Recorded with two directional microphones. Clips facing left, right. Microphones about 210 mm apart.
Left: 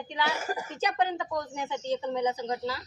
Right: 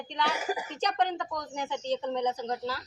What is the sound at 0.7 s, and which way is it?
A woman's voice, 5° left (ahead or behind).